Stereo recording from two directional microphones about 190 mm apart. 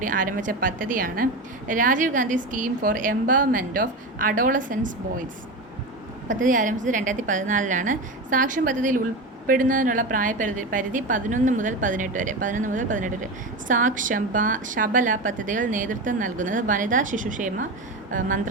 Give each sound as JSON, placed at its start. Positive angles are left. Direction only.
{"t": 0.0, "sound": "a woman's voice", "side_deg": -45}
{"t": 6.4, "sound": "a woman's voice", "side_deg": -45}